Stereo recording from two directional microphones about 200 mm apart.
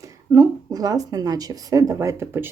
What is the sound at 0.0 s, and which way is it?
Speech, 15° right (ahead or behind).